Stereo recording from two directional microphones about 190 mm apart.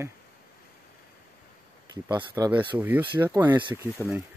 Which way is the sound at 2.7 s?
10° right (ahead or behind).